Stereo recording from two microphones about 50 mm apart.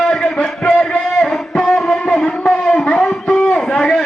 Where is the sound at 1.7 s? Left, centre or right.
Centre.